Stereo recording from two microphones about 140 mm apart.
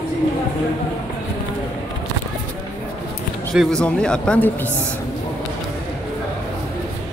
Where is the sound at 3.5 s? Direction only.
Centre (ahead or behind).